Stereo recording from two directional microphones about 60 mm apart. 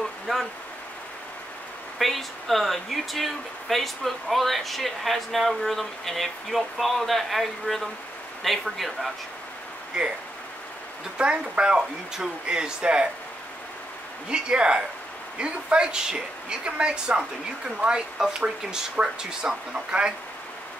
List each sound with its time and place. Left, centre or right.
2.0 s speech: centre
11.1 s speech: centre
14.3 s speech: centre